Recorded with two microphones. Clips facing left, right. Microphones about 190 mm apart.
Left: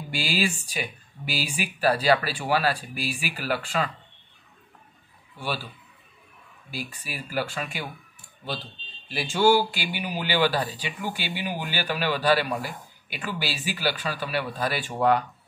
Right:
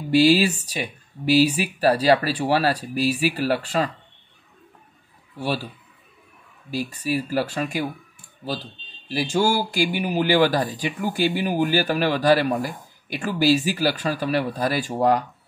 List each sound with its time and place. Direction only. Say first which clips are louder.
0.1 s speech: right 11 dB; 35° right (ahead or behind)
5.4 s speech: right 6 dB; 40° right (ahead or behind)
6.7 s speech: right 11 dB; 40° right (ahead or behind)
9.1 s speech: even; 40° right (ahead or behind)